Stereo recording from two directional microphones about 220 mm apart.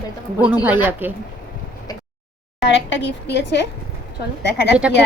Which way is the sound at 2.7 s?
55° left (ahead or behind).